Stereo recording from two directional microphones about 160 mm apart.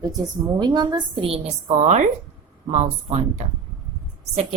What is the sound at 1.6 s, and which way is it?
A woman's voice, 45° right (ahead or behind).